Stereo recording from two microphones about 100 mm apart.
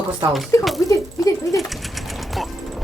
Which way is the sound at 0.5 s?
30° left (ahead or behind).